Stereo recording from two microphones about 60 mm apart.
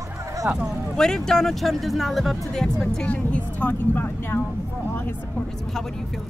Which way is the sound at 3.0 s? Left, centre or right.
Left.